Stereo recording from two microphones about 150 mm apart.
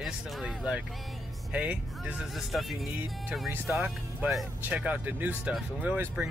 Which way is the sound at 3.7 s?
15° right (ahead or behind).